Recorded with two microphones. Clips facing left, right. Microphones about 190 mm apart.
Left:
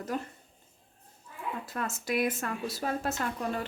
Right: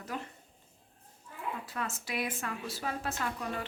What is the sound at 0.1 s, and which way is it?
Speech, 45° left (ahead or behind).